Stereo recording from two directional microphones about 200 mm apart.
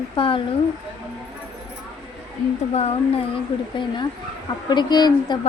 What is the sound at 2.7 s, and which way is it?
Speech, 30° left (ahead or behind).